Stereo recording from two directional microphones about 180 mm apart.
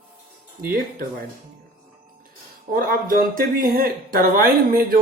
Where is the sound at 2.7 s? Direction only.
55° right (ahead or behind).